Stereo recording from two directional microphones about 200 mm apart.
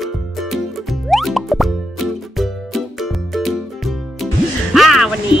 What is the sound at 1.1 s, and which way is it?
Music, centre (ahead or behind).